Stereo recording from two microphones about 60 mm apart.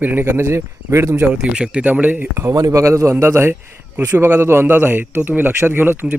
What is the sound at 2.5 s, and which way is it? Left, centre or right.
Speech, right.